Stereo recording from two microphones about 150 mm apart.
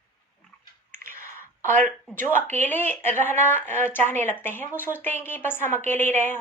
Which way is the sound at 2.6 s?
15° left (ahead or behind).